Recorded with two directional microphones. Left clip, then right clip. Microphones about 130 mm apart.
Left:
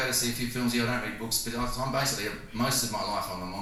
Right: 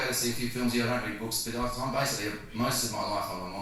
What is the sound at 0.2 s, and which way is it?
A man's voice, 35° right (ahead or behind).